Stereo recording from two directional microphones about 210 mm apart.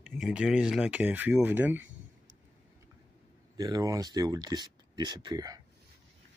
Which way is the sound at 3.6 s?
15° right (ahead or behind).